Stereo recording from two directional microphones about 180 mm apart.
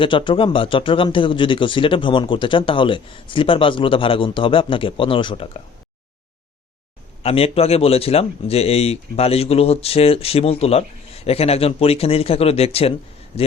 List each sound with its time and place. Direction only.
0.0 s speech: 30° left (ahead or behind)
7.2 s speech: 35° left (ahead or behind)